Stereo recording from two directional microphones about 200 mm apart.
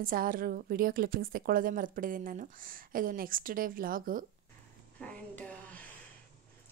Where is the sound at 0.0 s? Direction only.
45° right (ahead or behind).